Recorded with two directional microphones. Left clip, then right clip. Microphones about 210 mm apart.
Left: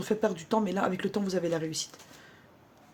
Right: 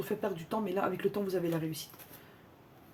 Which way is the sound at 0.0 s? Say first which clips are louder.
Left 6 dB; 45° left (ahead or behind).